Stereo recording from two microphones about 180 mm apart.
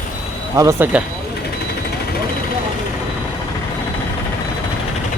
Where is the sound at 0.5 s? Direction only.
20° right (ahead or behind).